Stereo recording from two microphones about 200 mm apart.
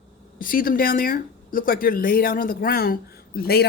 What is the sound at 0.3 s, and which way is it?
Speech, 45° left (ahead or behind).